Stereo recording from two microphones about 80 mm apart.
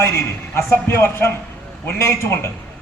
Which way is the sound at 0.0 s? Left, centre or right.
Left.